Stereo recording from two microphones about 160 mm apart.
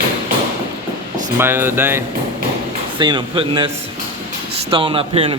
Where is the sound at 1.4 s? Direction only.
15° right (ahead or behind).